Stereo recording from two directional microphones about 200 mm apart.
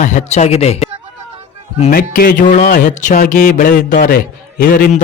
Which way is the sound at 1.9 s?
45° left (ahead or behind).